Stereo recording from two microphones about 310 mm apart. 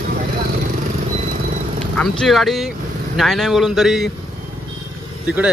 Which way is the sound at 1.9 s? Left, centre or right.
Centre.